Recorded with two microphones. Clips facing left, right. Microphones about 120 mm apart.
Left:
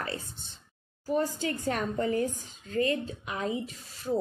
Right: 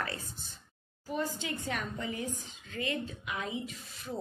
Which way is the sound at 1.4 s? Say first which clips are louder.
Left 6 dB; 40° left (ahead or behind).